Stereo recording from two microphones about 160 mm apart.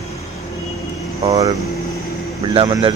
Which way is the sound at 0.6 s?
20° left (ahead or behind).